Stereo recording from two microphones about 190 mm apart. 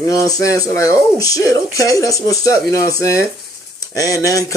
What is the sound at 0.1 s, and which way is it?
A man's voice, 15° left (ahead or behind).